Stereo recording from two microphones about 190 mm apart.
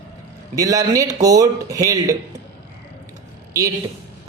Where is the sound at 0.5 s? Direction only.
20° right (ahead or behind).